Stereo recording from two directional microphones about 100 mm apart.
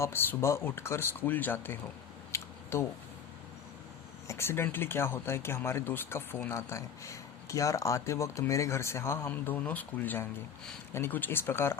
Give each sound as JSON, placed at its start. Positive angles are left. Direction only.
{"t": 0.0, "sound": "speech", "side_deg": 20}
{"t": 2.3, "sound": "a sound", "side_deg": 25}
{"t": 4.3, "sound": "speech", "side_deg": 25}